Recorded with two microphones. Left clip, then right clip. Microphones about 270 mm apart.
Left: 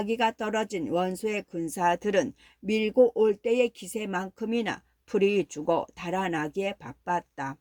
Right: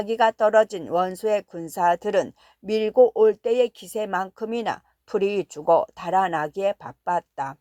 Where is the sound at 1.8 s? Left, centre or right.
Right.